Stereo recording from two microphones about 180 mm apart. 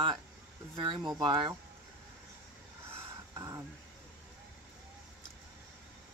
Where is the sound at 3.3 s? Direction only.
20° right (ahead or behind).